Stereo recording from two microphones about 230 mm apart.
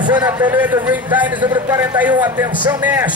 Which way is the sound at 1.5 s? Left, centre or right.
Centre.